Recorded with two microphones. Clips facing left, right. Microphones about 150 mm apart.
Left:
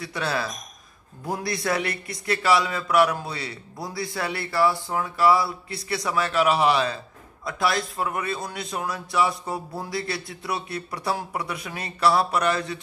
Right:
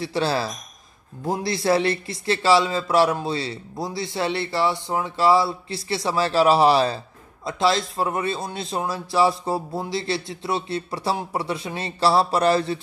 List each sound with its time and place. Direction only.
0.0 s a man's voice: 30° right (ahead or behind)